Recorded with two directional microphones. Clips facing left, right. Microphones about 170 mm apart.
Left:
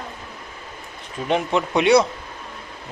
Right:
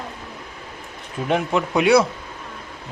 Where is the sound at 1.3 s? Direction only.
5° right (ahead or behind).